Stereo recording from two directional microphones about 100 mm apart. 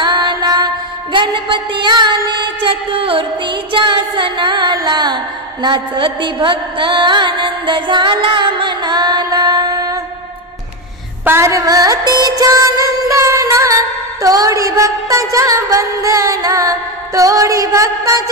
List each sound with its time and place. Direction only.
0.0 s music: 50° right (ahead or behind)
1.1 s a woman's voice: 55° right (ahead or behind); by 9.9 s 40° right (ahead or behind)
11.2 s music: 30° right (ahead or behind)